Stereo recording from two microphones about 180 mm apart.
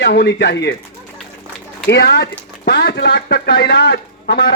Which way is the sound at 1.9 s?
70° left (ahead or behind).